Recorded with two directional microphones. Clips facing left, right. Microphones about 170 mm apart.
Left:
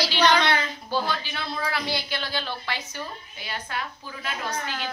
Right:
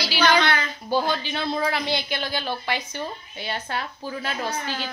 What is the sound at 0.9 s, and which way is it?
A woman's voice, 15° right (ahead or behind).